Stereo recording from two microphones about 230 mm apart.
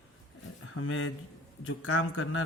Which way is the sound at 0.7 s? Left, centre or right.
Left.